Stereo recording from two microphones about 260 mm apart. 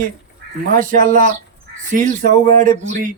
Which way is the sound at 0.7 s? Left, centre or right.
Right.